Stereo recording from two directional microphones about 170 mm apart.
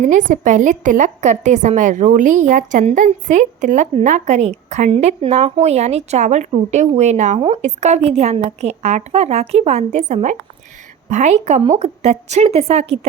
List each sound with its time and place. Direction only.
0.0 s a woman's voice: 45° right (ahead or behind)